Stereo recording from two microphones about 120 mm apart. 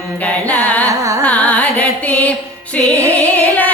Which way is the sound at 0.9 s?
25° right (ahead or behind).